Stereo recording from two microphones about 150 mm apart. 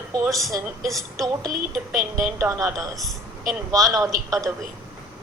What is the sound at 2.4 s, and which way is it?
Speech, 20° right (ahead or behind).